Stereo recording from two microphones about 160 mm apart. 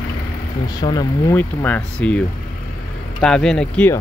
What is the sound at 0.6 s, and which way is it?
Speech, 25° left (ahead or behind).